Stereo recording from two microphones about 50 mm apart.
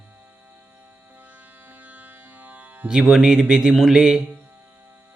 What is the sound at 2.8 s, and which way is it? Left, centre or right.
Speech, centre.